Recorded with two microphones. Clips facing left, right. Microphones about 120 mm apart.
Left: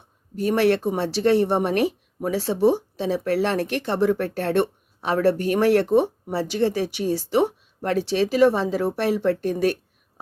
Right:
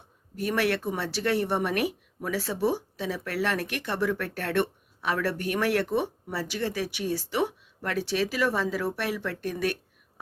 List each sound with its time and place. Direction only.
0.3 s speech: 30° left (ahead or behind)